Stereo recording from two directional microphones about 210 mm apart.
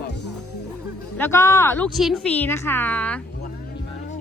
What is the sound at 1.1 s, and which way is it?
A woman's voice, 10° left (ahead or behind).